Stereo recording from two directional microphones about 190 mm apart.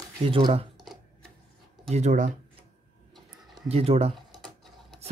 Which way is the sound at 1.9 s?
40° right (ahead or behind).